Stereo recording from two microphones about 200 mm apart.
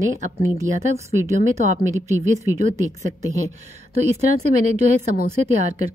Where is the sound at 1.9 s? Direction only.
15° right (ahead or behind).